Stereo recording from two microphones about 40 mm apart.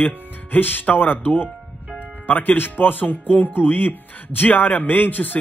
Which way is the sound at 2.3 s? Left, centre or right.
Left.